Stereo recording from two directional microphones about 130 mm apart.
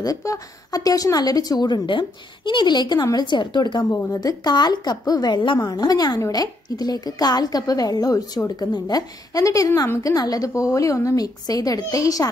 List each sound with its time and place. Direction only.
0.0 s speech: 25° left (ahead or behind)